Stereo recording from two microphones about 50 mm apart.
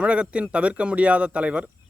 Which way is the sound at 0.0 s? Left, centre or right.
Right.